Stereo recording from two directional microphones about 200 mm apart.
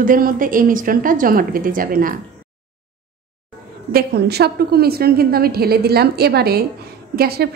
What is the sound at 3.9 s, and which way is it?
A woman's voice, 55° right (ahead or behind).